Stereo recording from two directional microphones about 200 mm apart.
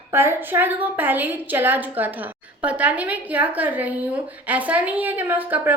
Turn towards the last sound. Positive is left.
turn(degrees=-10)  # may be behind; listen again after turning